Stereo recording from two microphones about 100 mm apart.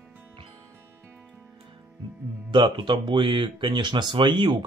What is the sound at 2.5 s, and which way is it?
Speech, 55° right (ahead or behind).